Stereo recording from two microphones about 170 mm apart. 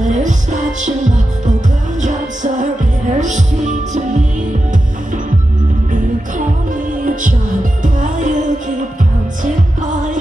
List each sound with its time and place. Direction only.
0.0 s music: 45° right (ahead or behind)
6.9 s music: 55° right (ahead or behind)